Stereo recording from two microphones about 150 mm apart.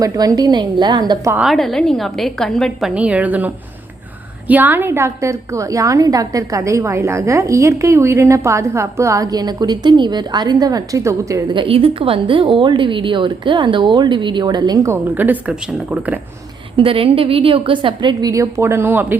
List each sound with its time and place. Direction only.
0.0 s a woman's voice: 25° right (ahead or behind)
1.4 s a woman's voice: centre (ahead or behind)
2.9 s a woman's voice: 10° right (ahead or behind)
11.5 s a woman's voice: 35° right (ahead or behind); by 16.2 s 10° right (ahead or behind)
16.7 s a woman's voice: 35° right (ahead or behind); by 19.1 s 10° right (ahead or behind)